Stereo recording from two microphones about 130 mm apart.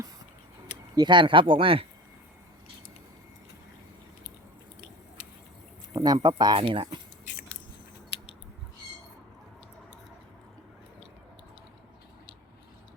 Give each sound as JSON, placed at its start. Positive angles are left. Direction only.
{"t": 0.9, "sound": "speech", "side_deg": -35}
{"t": 5.9, "sound": "speech", "side_deg": -30}